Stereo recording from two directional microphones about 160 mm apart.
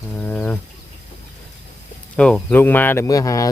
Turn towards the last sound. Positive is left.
turn(degrees=20)  # may be behind; listen again after turning